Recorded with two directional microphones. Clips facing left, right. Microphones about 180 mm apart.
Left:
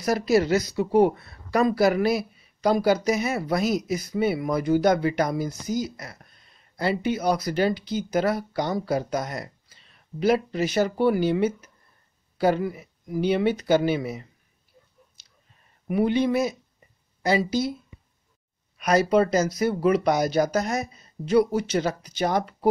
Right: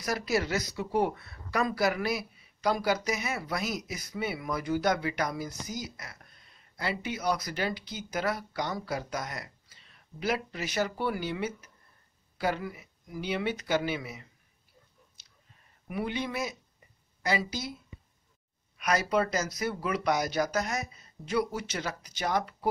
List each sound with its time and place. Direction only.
0.0 s speech: 30° left (ahead or behind)
15.9 s speech: 35° left (ahead or behind)
18.8 s speech: 30° left (ahead or behind)